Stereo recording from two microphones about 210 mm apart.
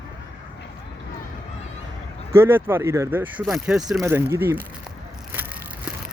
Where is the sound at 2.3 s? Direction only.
10° right (ahead or behind).